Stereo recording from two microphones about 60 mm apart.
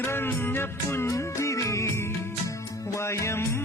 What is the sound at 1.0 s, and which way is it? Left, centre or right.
Music, left.